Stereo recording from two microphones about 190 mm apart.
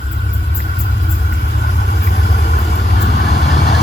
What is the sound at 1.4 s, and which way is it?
Vehicle, 50° left (ahead or behind).